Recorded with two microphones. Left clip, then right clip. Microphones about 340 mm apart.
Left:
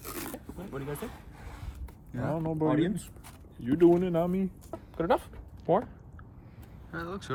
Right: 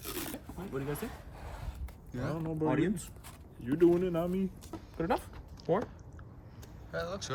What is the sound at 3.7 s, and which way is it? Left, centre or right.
Speech, centre.